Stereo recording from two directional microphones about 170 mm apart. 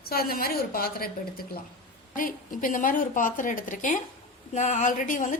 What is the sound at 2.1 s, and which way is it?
A woman's voice, 55° left (ahead or behind).